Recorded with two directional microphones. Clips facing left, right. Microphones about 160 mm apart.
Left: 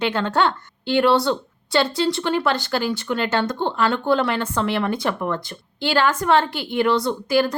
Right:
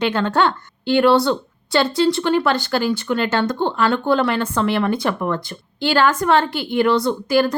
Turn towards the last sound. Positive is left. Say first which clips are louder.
# right 2 dB
turn(degrees=25)  # may be behind; listen again after turning